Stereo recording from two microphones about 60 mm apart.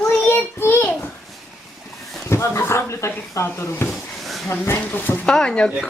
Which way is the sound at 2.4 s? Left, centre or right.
Left.